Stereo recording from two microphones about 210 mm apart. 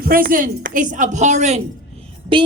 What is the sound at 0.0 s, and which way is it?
A woman's voice, 40° right (ahead or behind).